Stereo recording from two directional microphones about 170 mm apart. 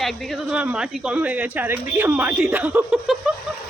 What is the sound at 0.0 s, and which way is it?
Speech, centre (ahead or behind).